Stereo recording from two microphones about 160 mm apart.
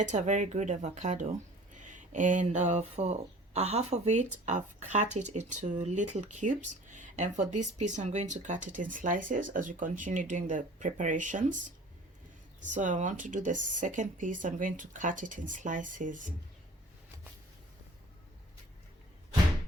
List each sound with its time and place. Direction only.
0.1 s speech: 50° right (ahead or behind)
12.6 s speech: 50° right (ahead or behind)